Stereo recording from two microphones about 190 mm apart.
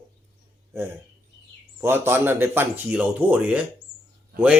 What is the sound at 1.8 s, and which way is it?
Speech, 10° right (ahead or behind).